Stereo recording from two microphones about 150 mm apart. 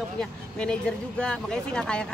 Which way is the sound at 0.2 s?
5° left (ahead or behind).